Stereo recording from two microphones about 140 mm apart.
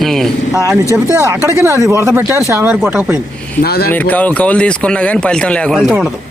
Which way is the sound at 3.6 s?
90° left.